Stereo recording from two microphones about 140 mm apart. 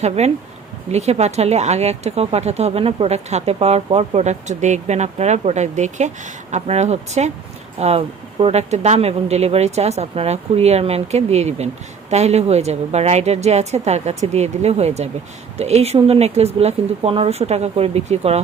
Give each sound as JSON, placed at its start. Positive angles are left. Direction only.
{"t": 0.2, "sound": "speech", "side_deg": -50}